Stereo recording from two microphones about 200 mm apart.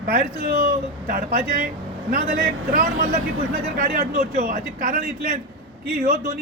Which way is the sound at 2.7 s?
45° right (ahead or behind).